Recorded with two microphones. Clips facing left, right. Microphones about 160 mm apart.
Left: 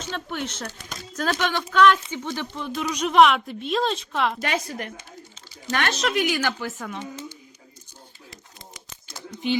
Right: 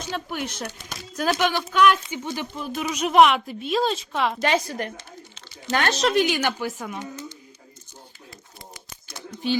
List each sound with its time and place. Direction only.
0.0 s speech: 10° right (ahead or behind)
4.4 s speech: 30° right (ahead or behind)
6.4 s speech: 10° right (ahead or behind)